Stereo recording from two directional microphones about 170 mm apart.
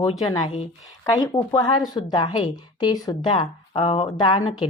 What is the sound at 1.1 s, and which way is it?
Speech, 25° left (ahead or behind).